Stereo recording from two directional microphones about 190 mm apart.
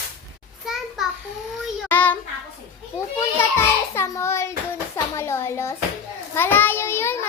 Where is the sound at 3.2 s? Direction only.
15° left (ahead or behind).